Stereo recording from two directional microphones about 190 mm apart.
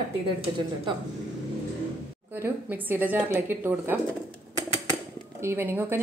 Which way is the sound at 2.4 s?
10° right (ahead or behind).